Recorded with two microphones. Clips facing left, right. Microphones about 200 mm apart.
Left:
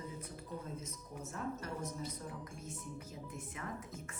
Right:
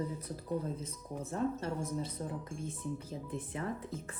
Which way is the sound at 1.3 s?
30° right (ahead or behind).